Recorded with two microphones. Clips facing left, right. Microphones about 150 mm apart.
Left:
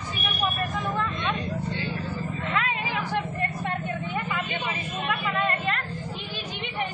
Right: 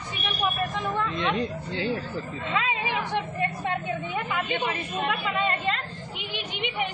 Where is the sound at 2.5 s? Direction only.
20° right (ahead or behind).